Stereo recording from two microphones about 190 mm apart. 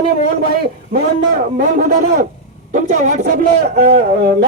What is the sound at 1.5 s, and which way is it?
Speech, 55° right (ahead or behind).